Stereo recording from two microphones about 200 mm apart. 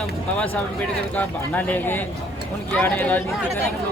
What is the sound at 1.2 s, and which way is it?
Speech, 10° left (ahead or behind).